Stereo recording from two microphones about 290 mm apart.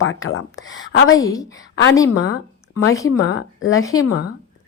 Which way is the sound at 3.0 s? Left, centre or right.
Left.